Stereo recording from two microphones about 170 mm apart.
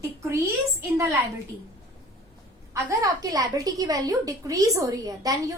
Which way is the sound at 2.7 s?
20° right (ahead or behind).